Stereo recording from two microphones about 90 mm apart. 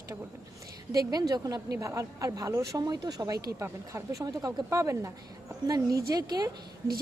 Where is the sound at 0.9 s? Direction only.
45° right (ahead or behind).